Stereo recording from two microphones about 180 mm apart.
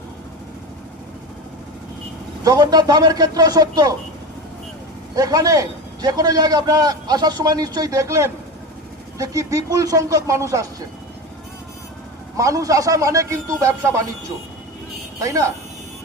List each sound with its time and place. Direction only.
2.4 s a man's voice: 20° right (ahead or behind)
5.1 s a man's voice: 20° right (ahead or behind)
12.4 s speech: 20° right (ahead or behind)
15.2 s a man's voice: 20° right (ahead or behind)